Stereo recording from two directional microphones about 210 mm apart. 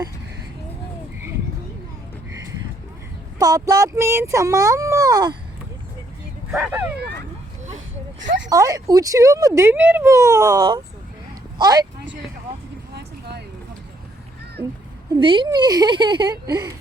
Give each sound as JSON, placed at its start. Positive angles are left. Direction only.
{"t": 3.3, "sound": "speech", "side_deg": -15}
{"t": 6.5, "sound": "speech", "side_deg": -5}
{"t": 8.4, "sound": "speech", "side_deg": -15}
{"t": 12.9, "sound": "vehicle", "side_deg": -50}
{"t": 15.2, "sound": "a woman's voice", "side_deg": -20}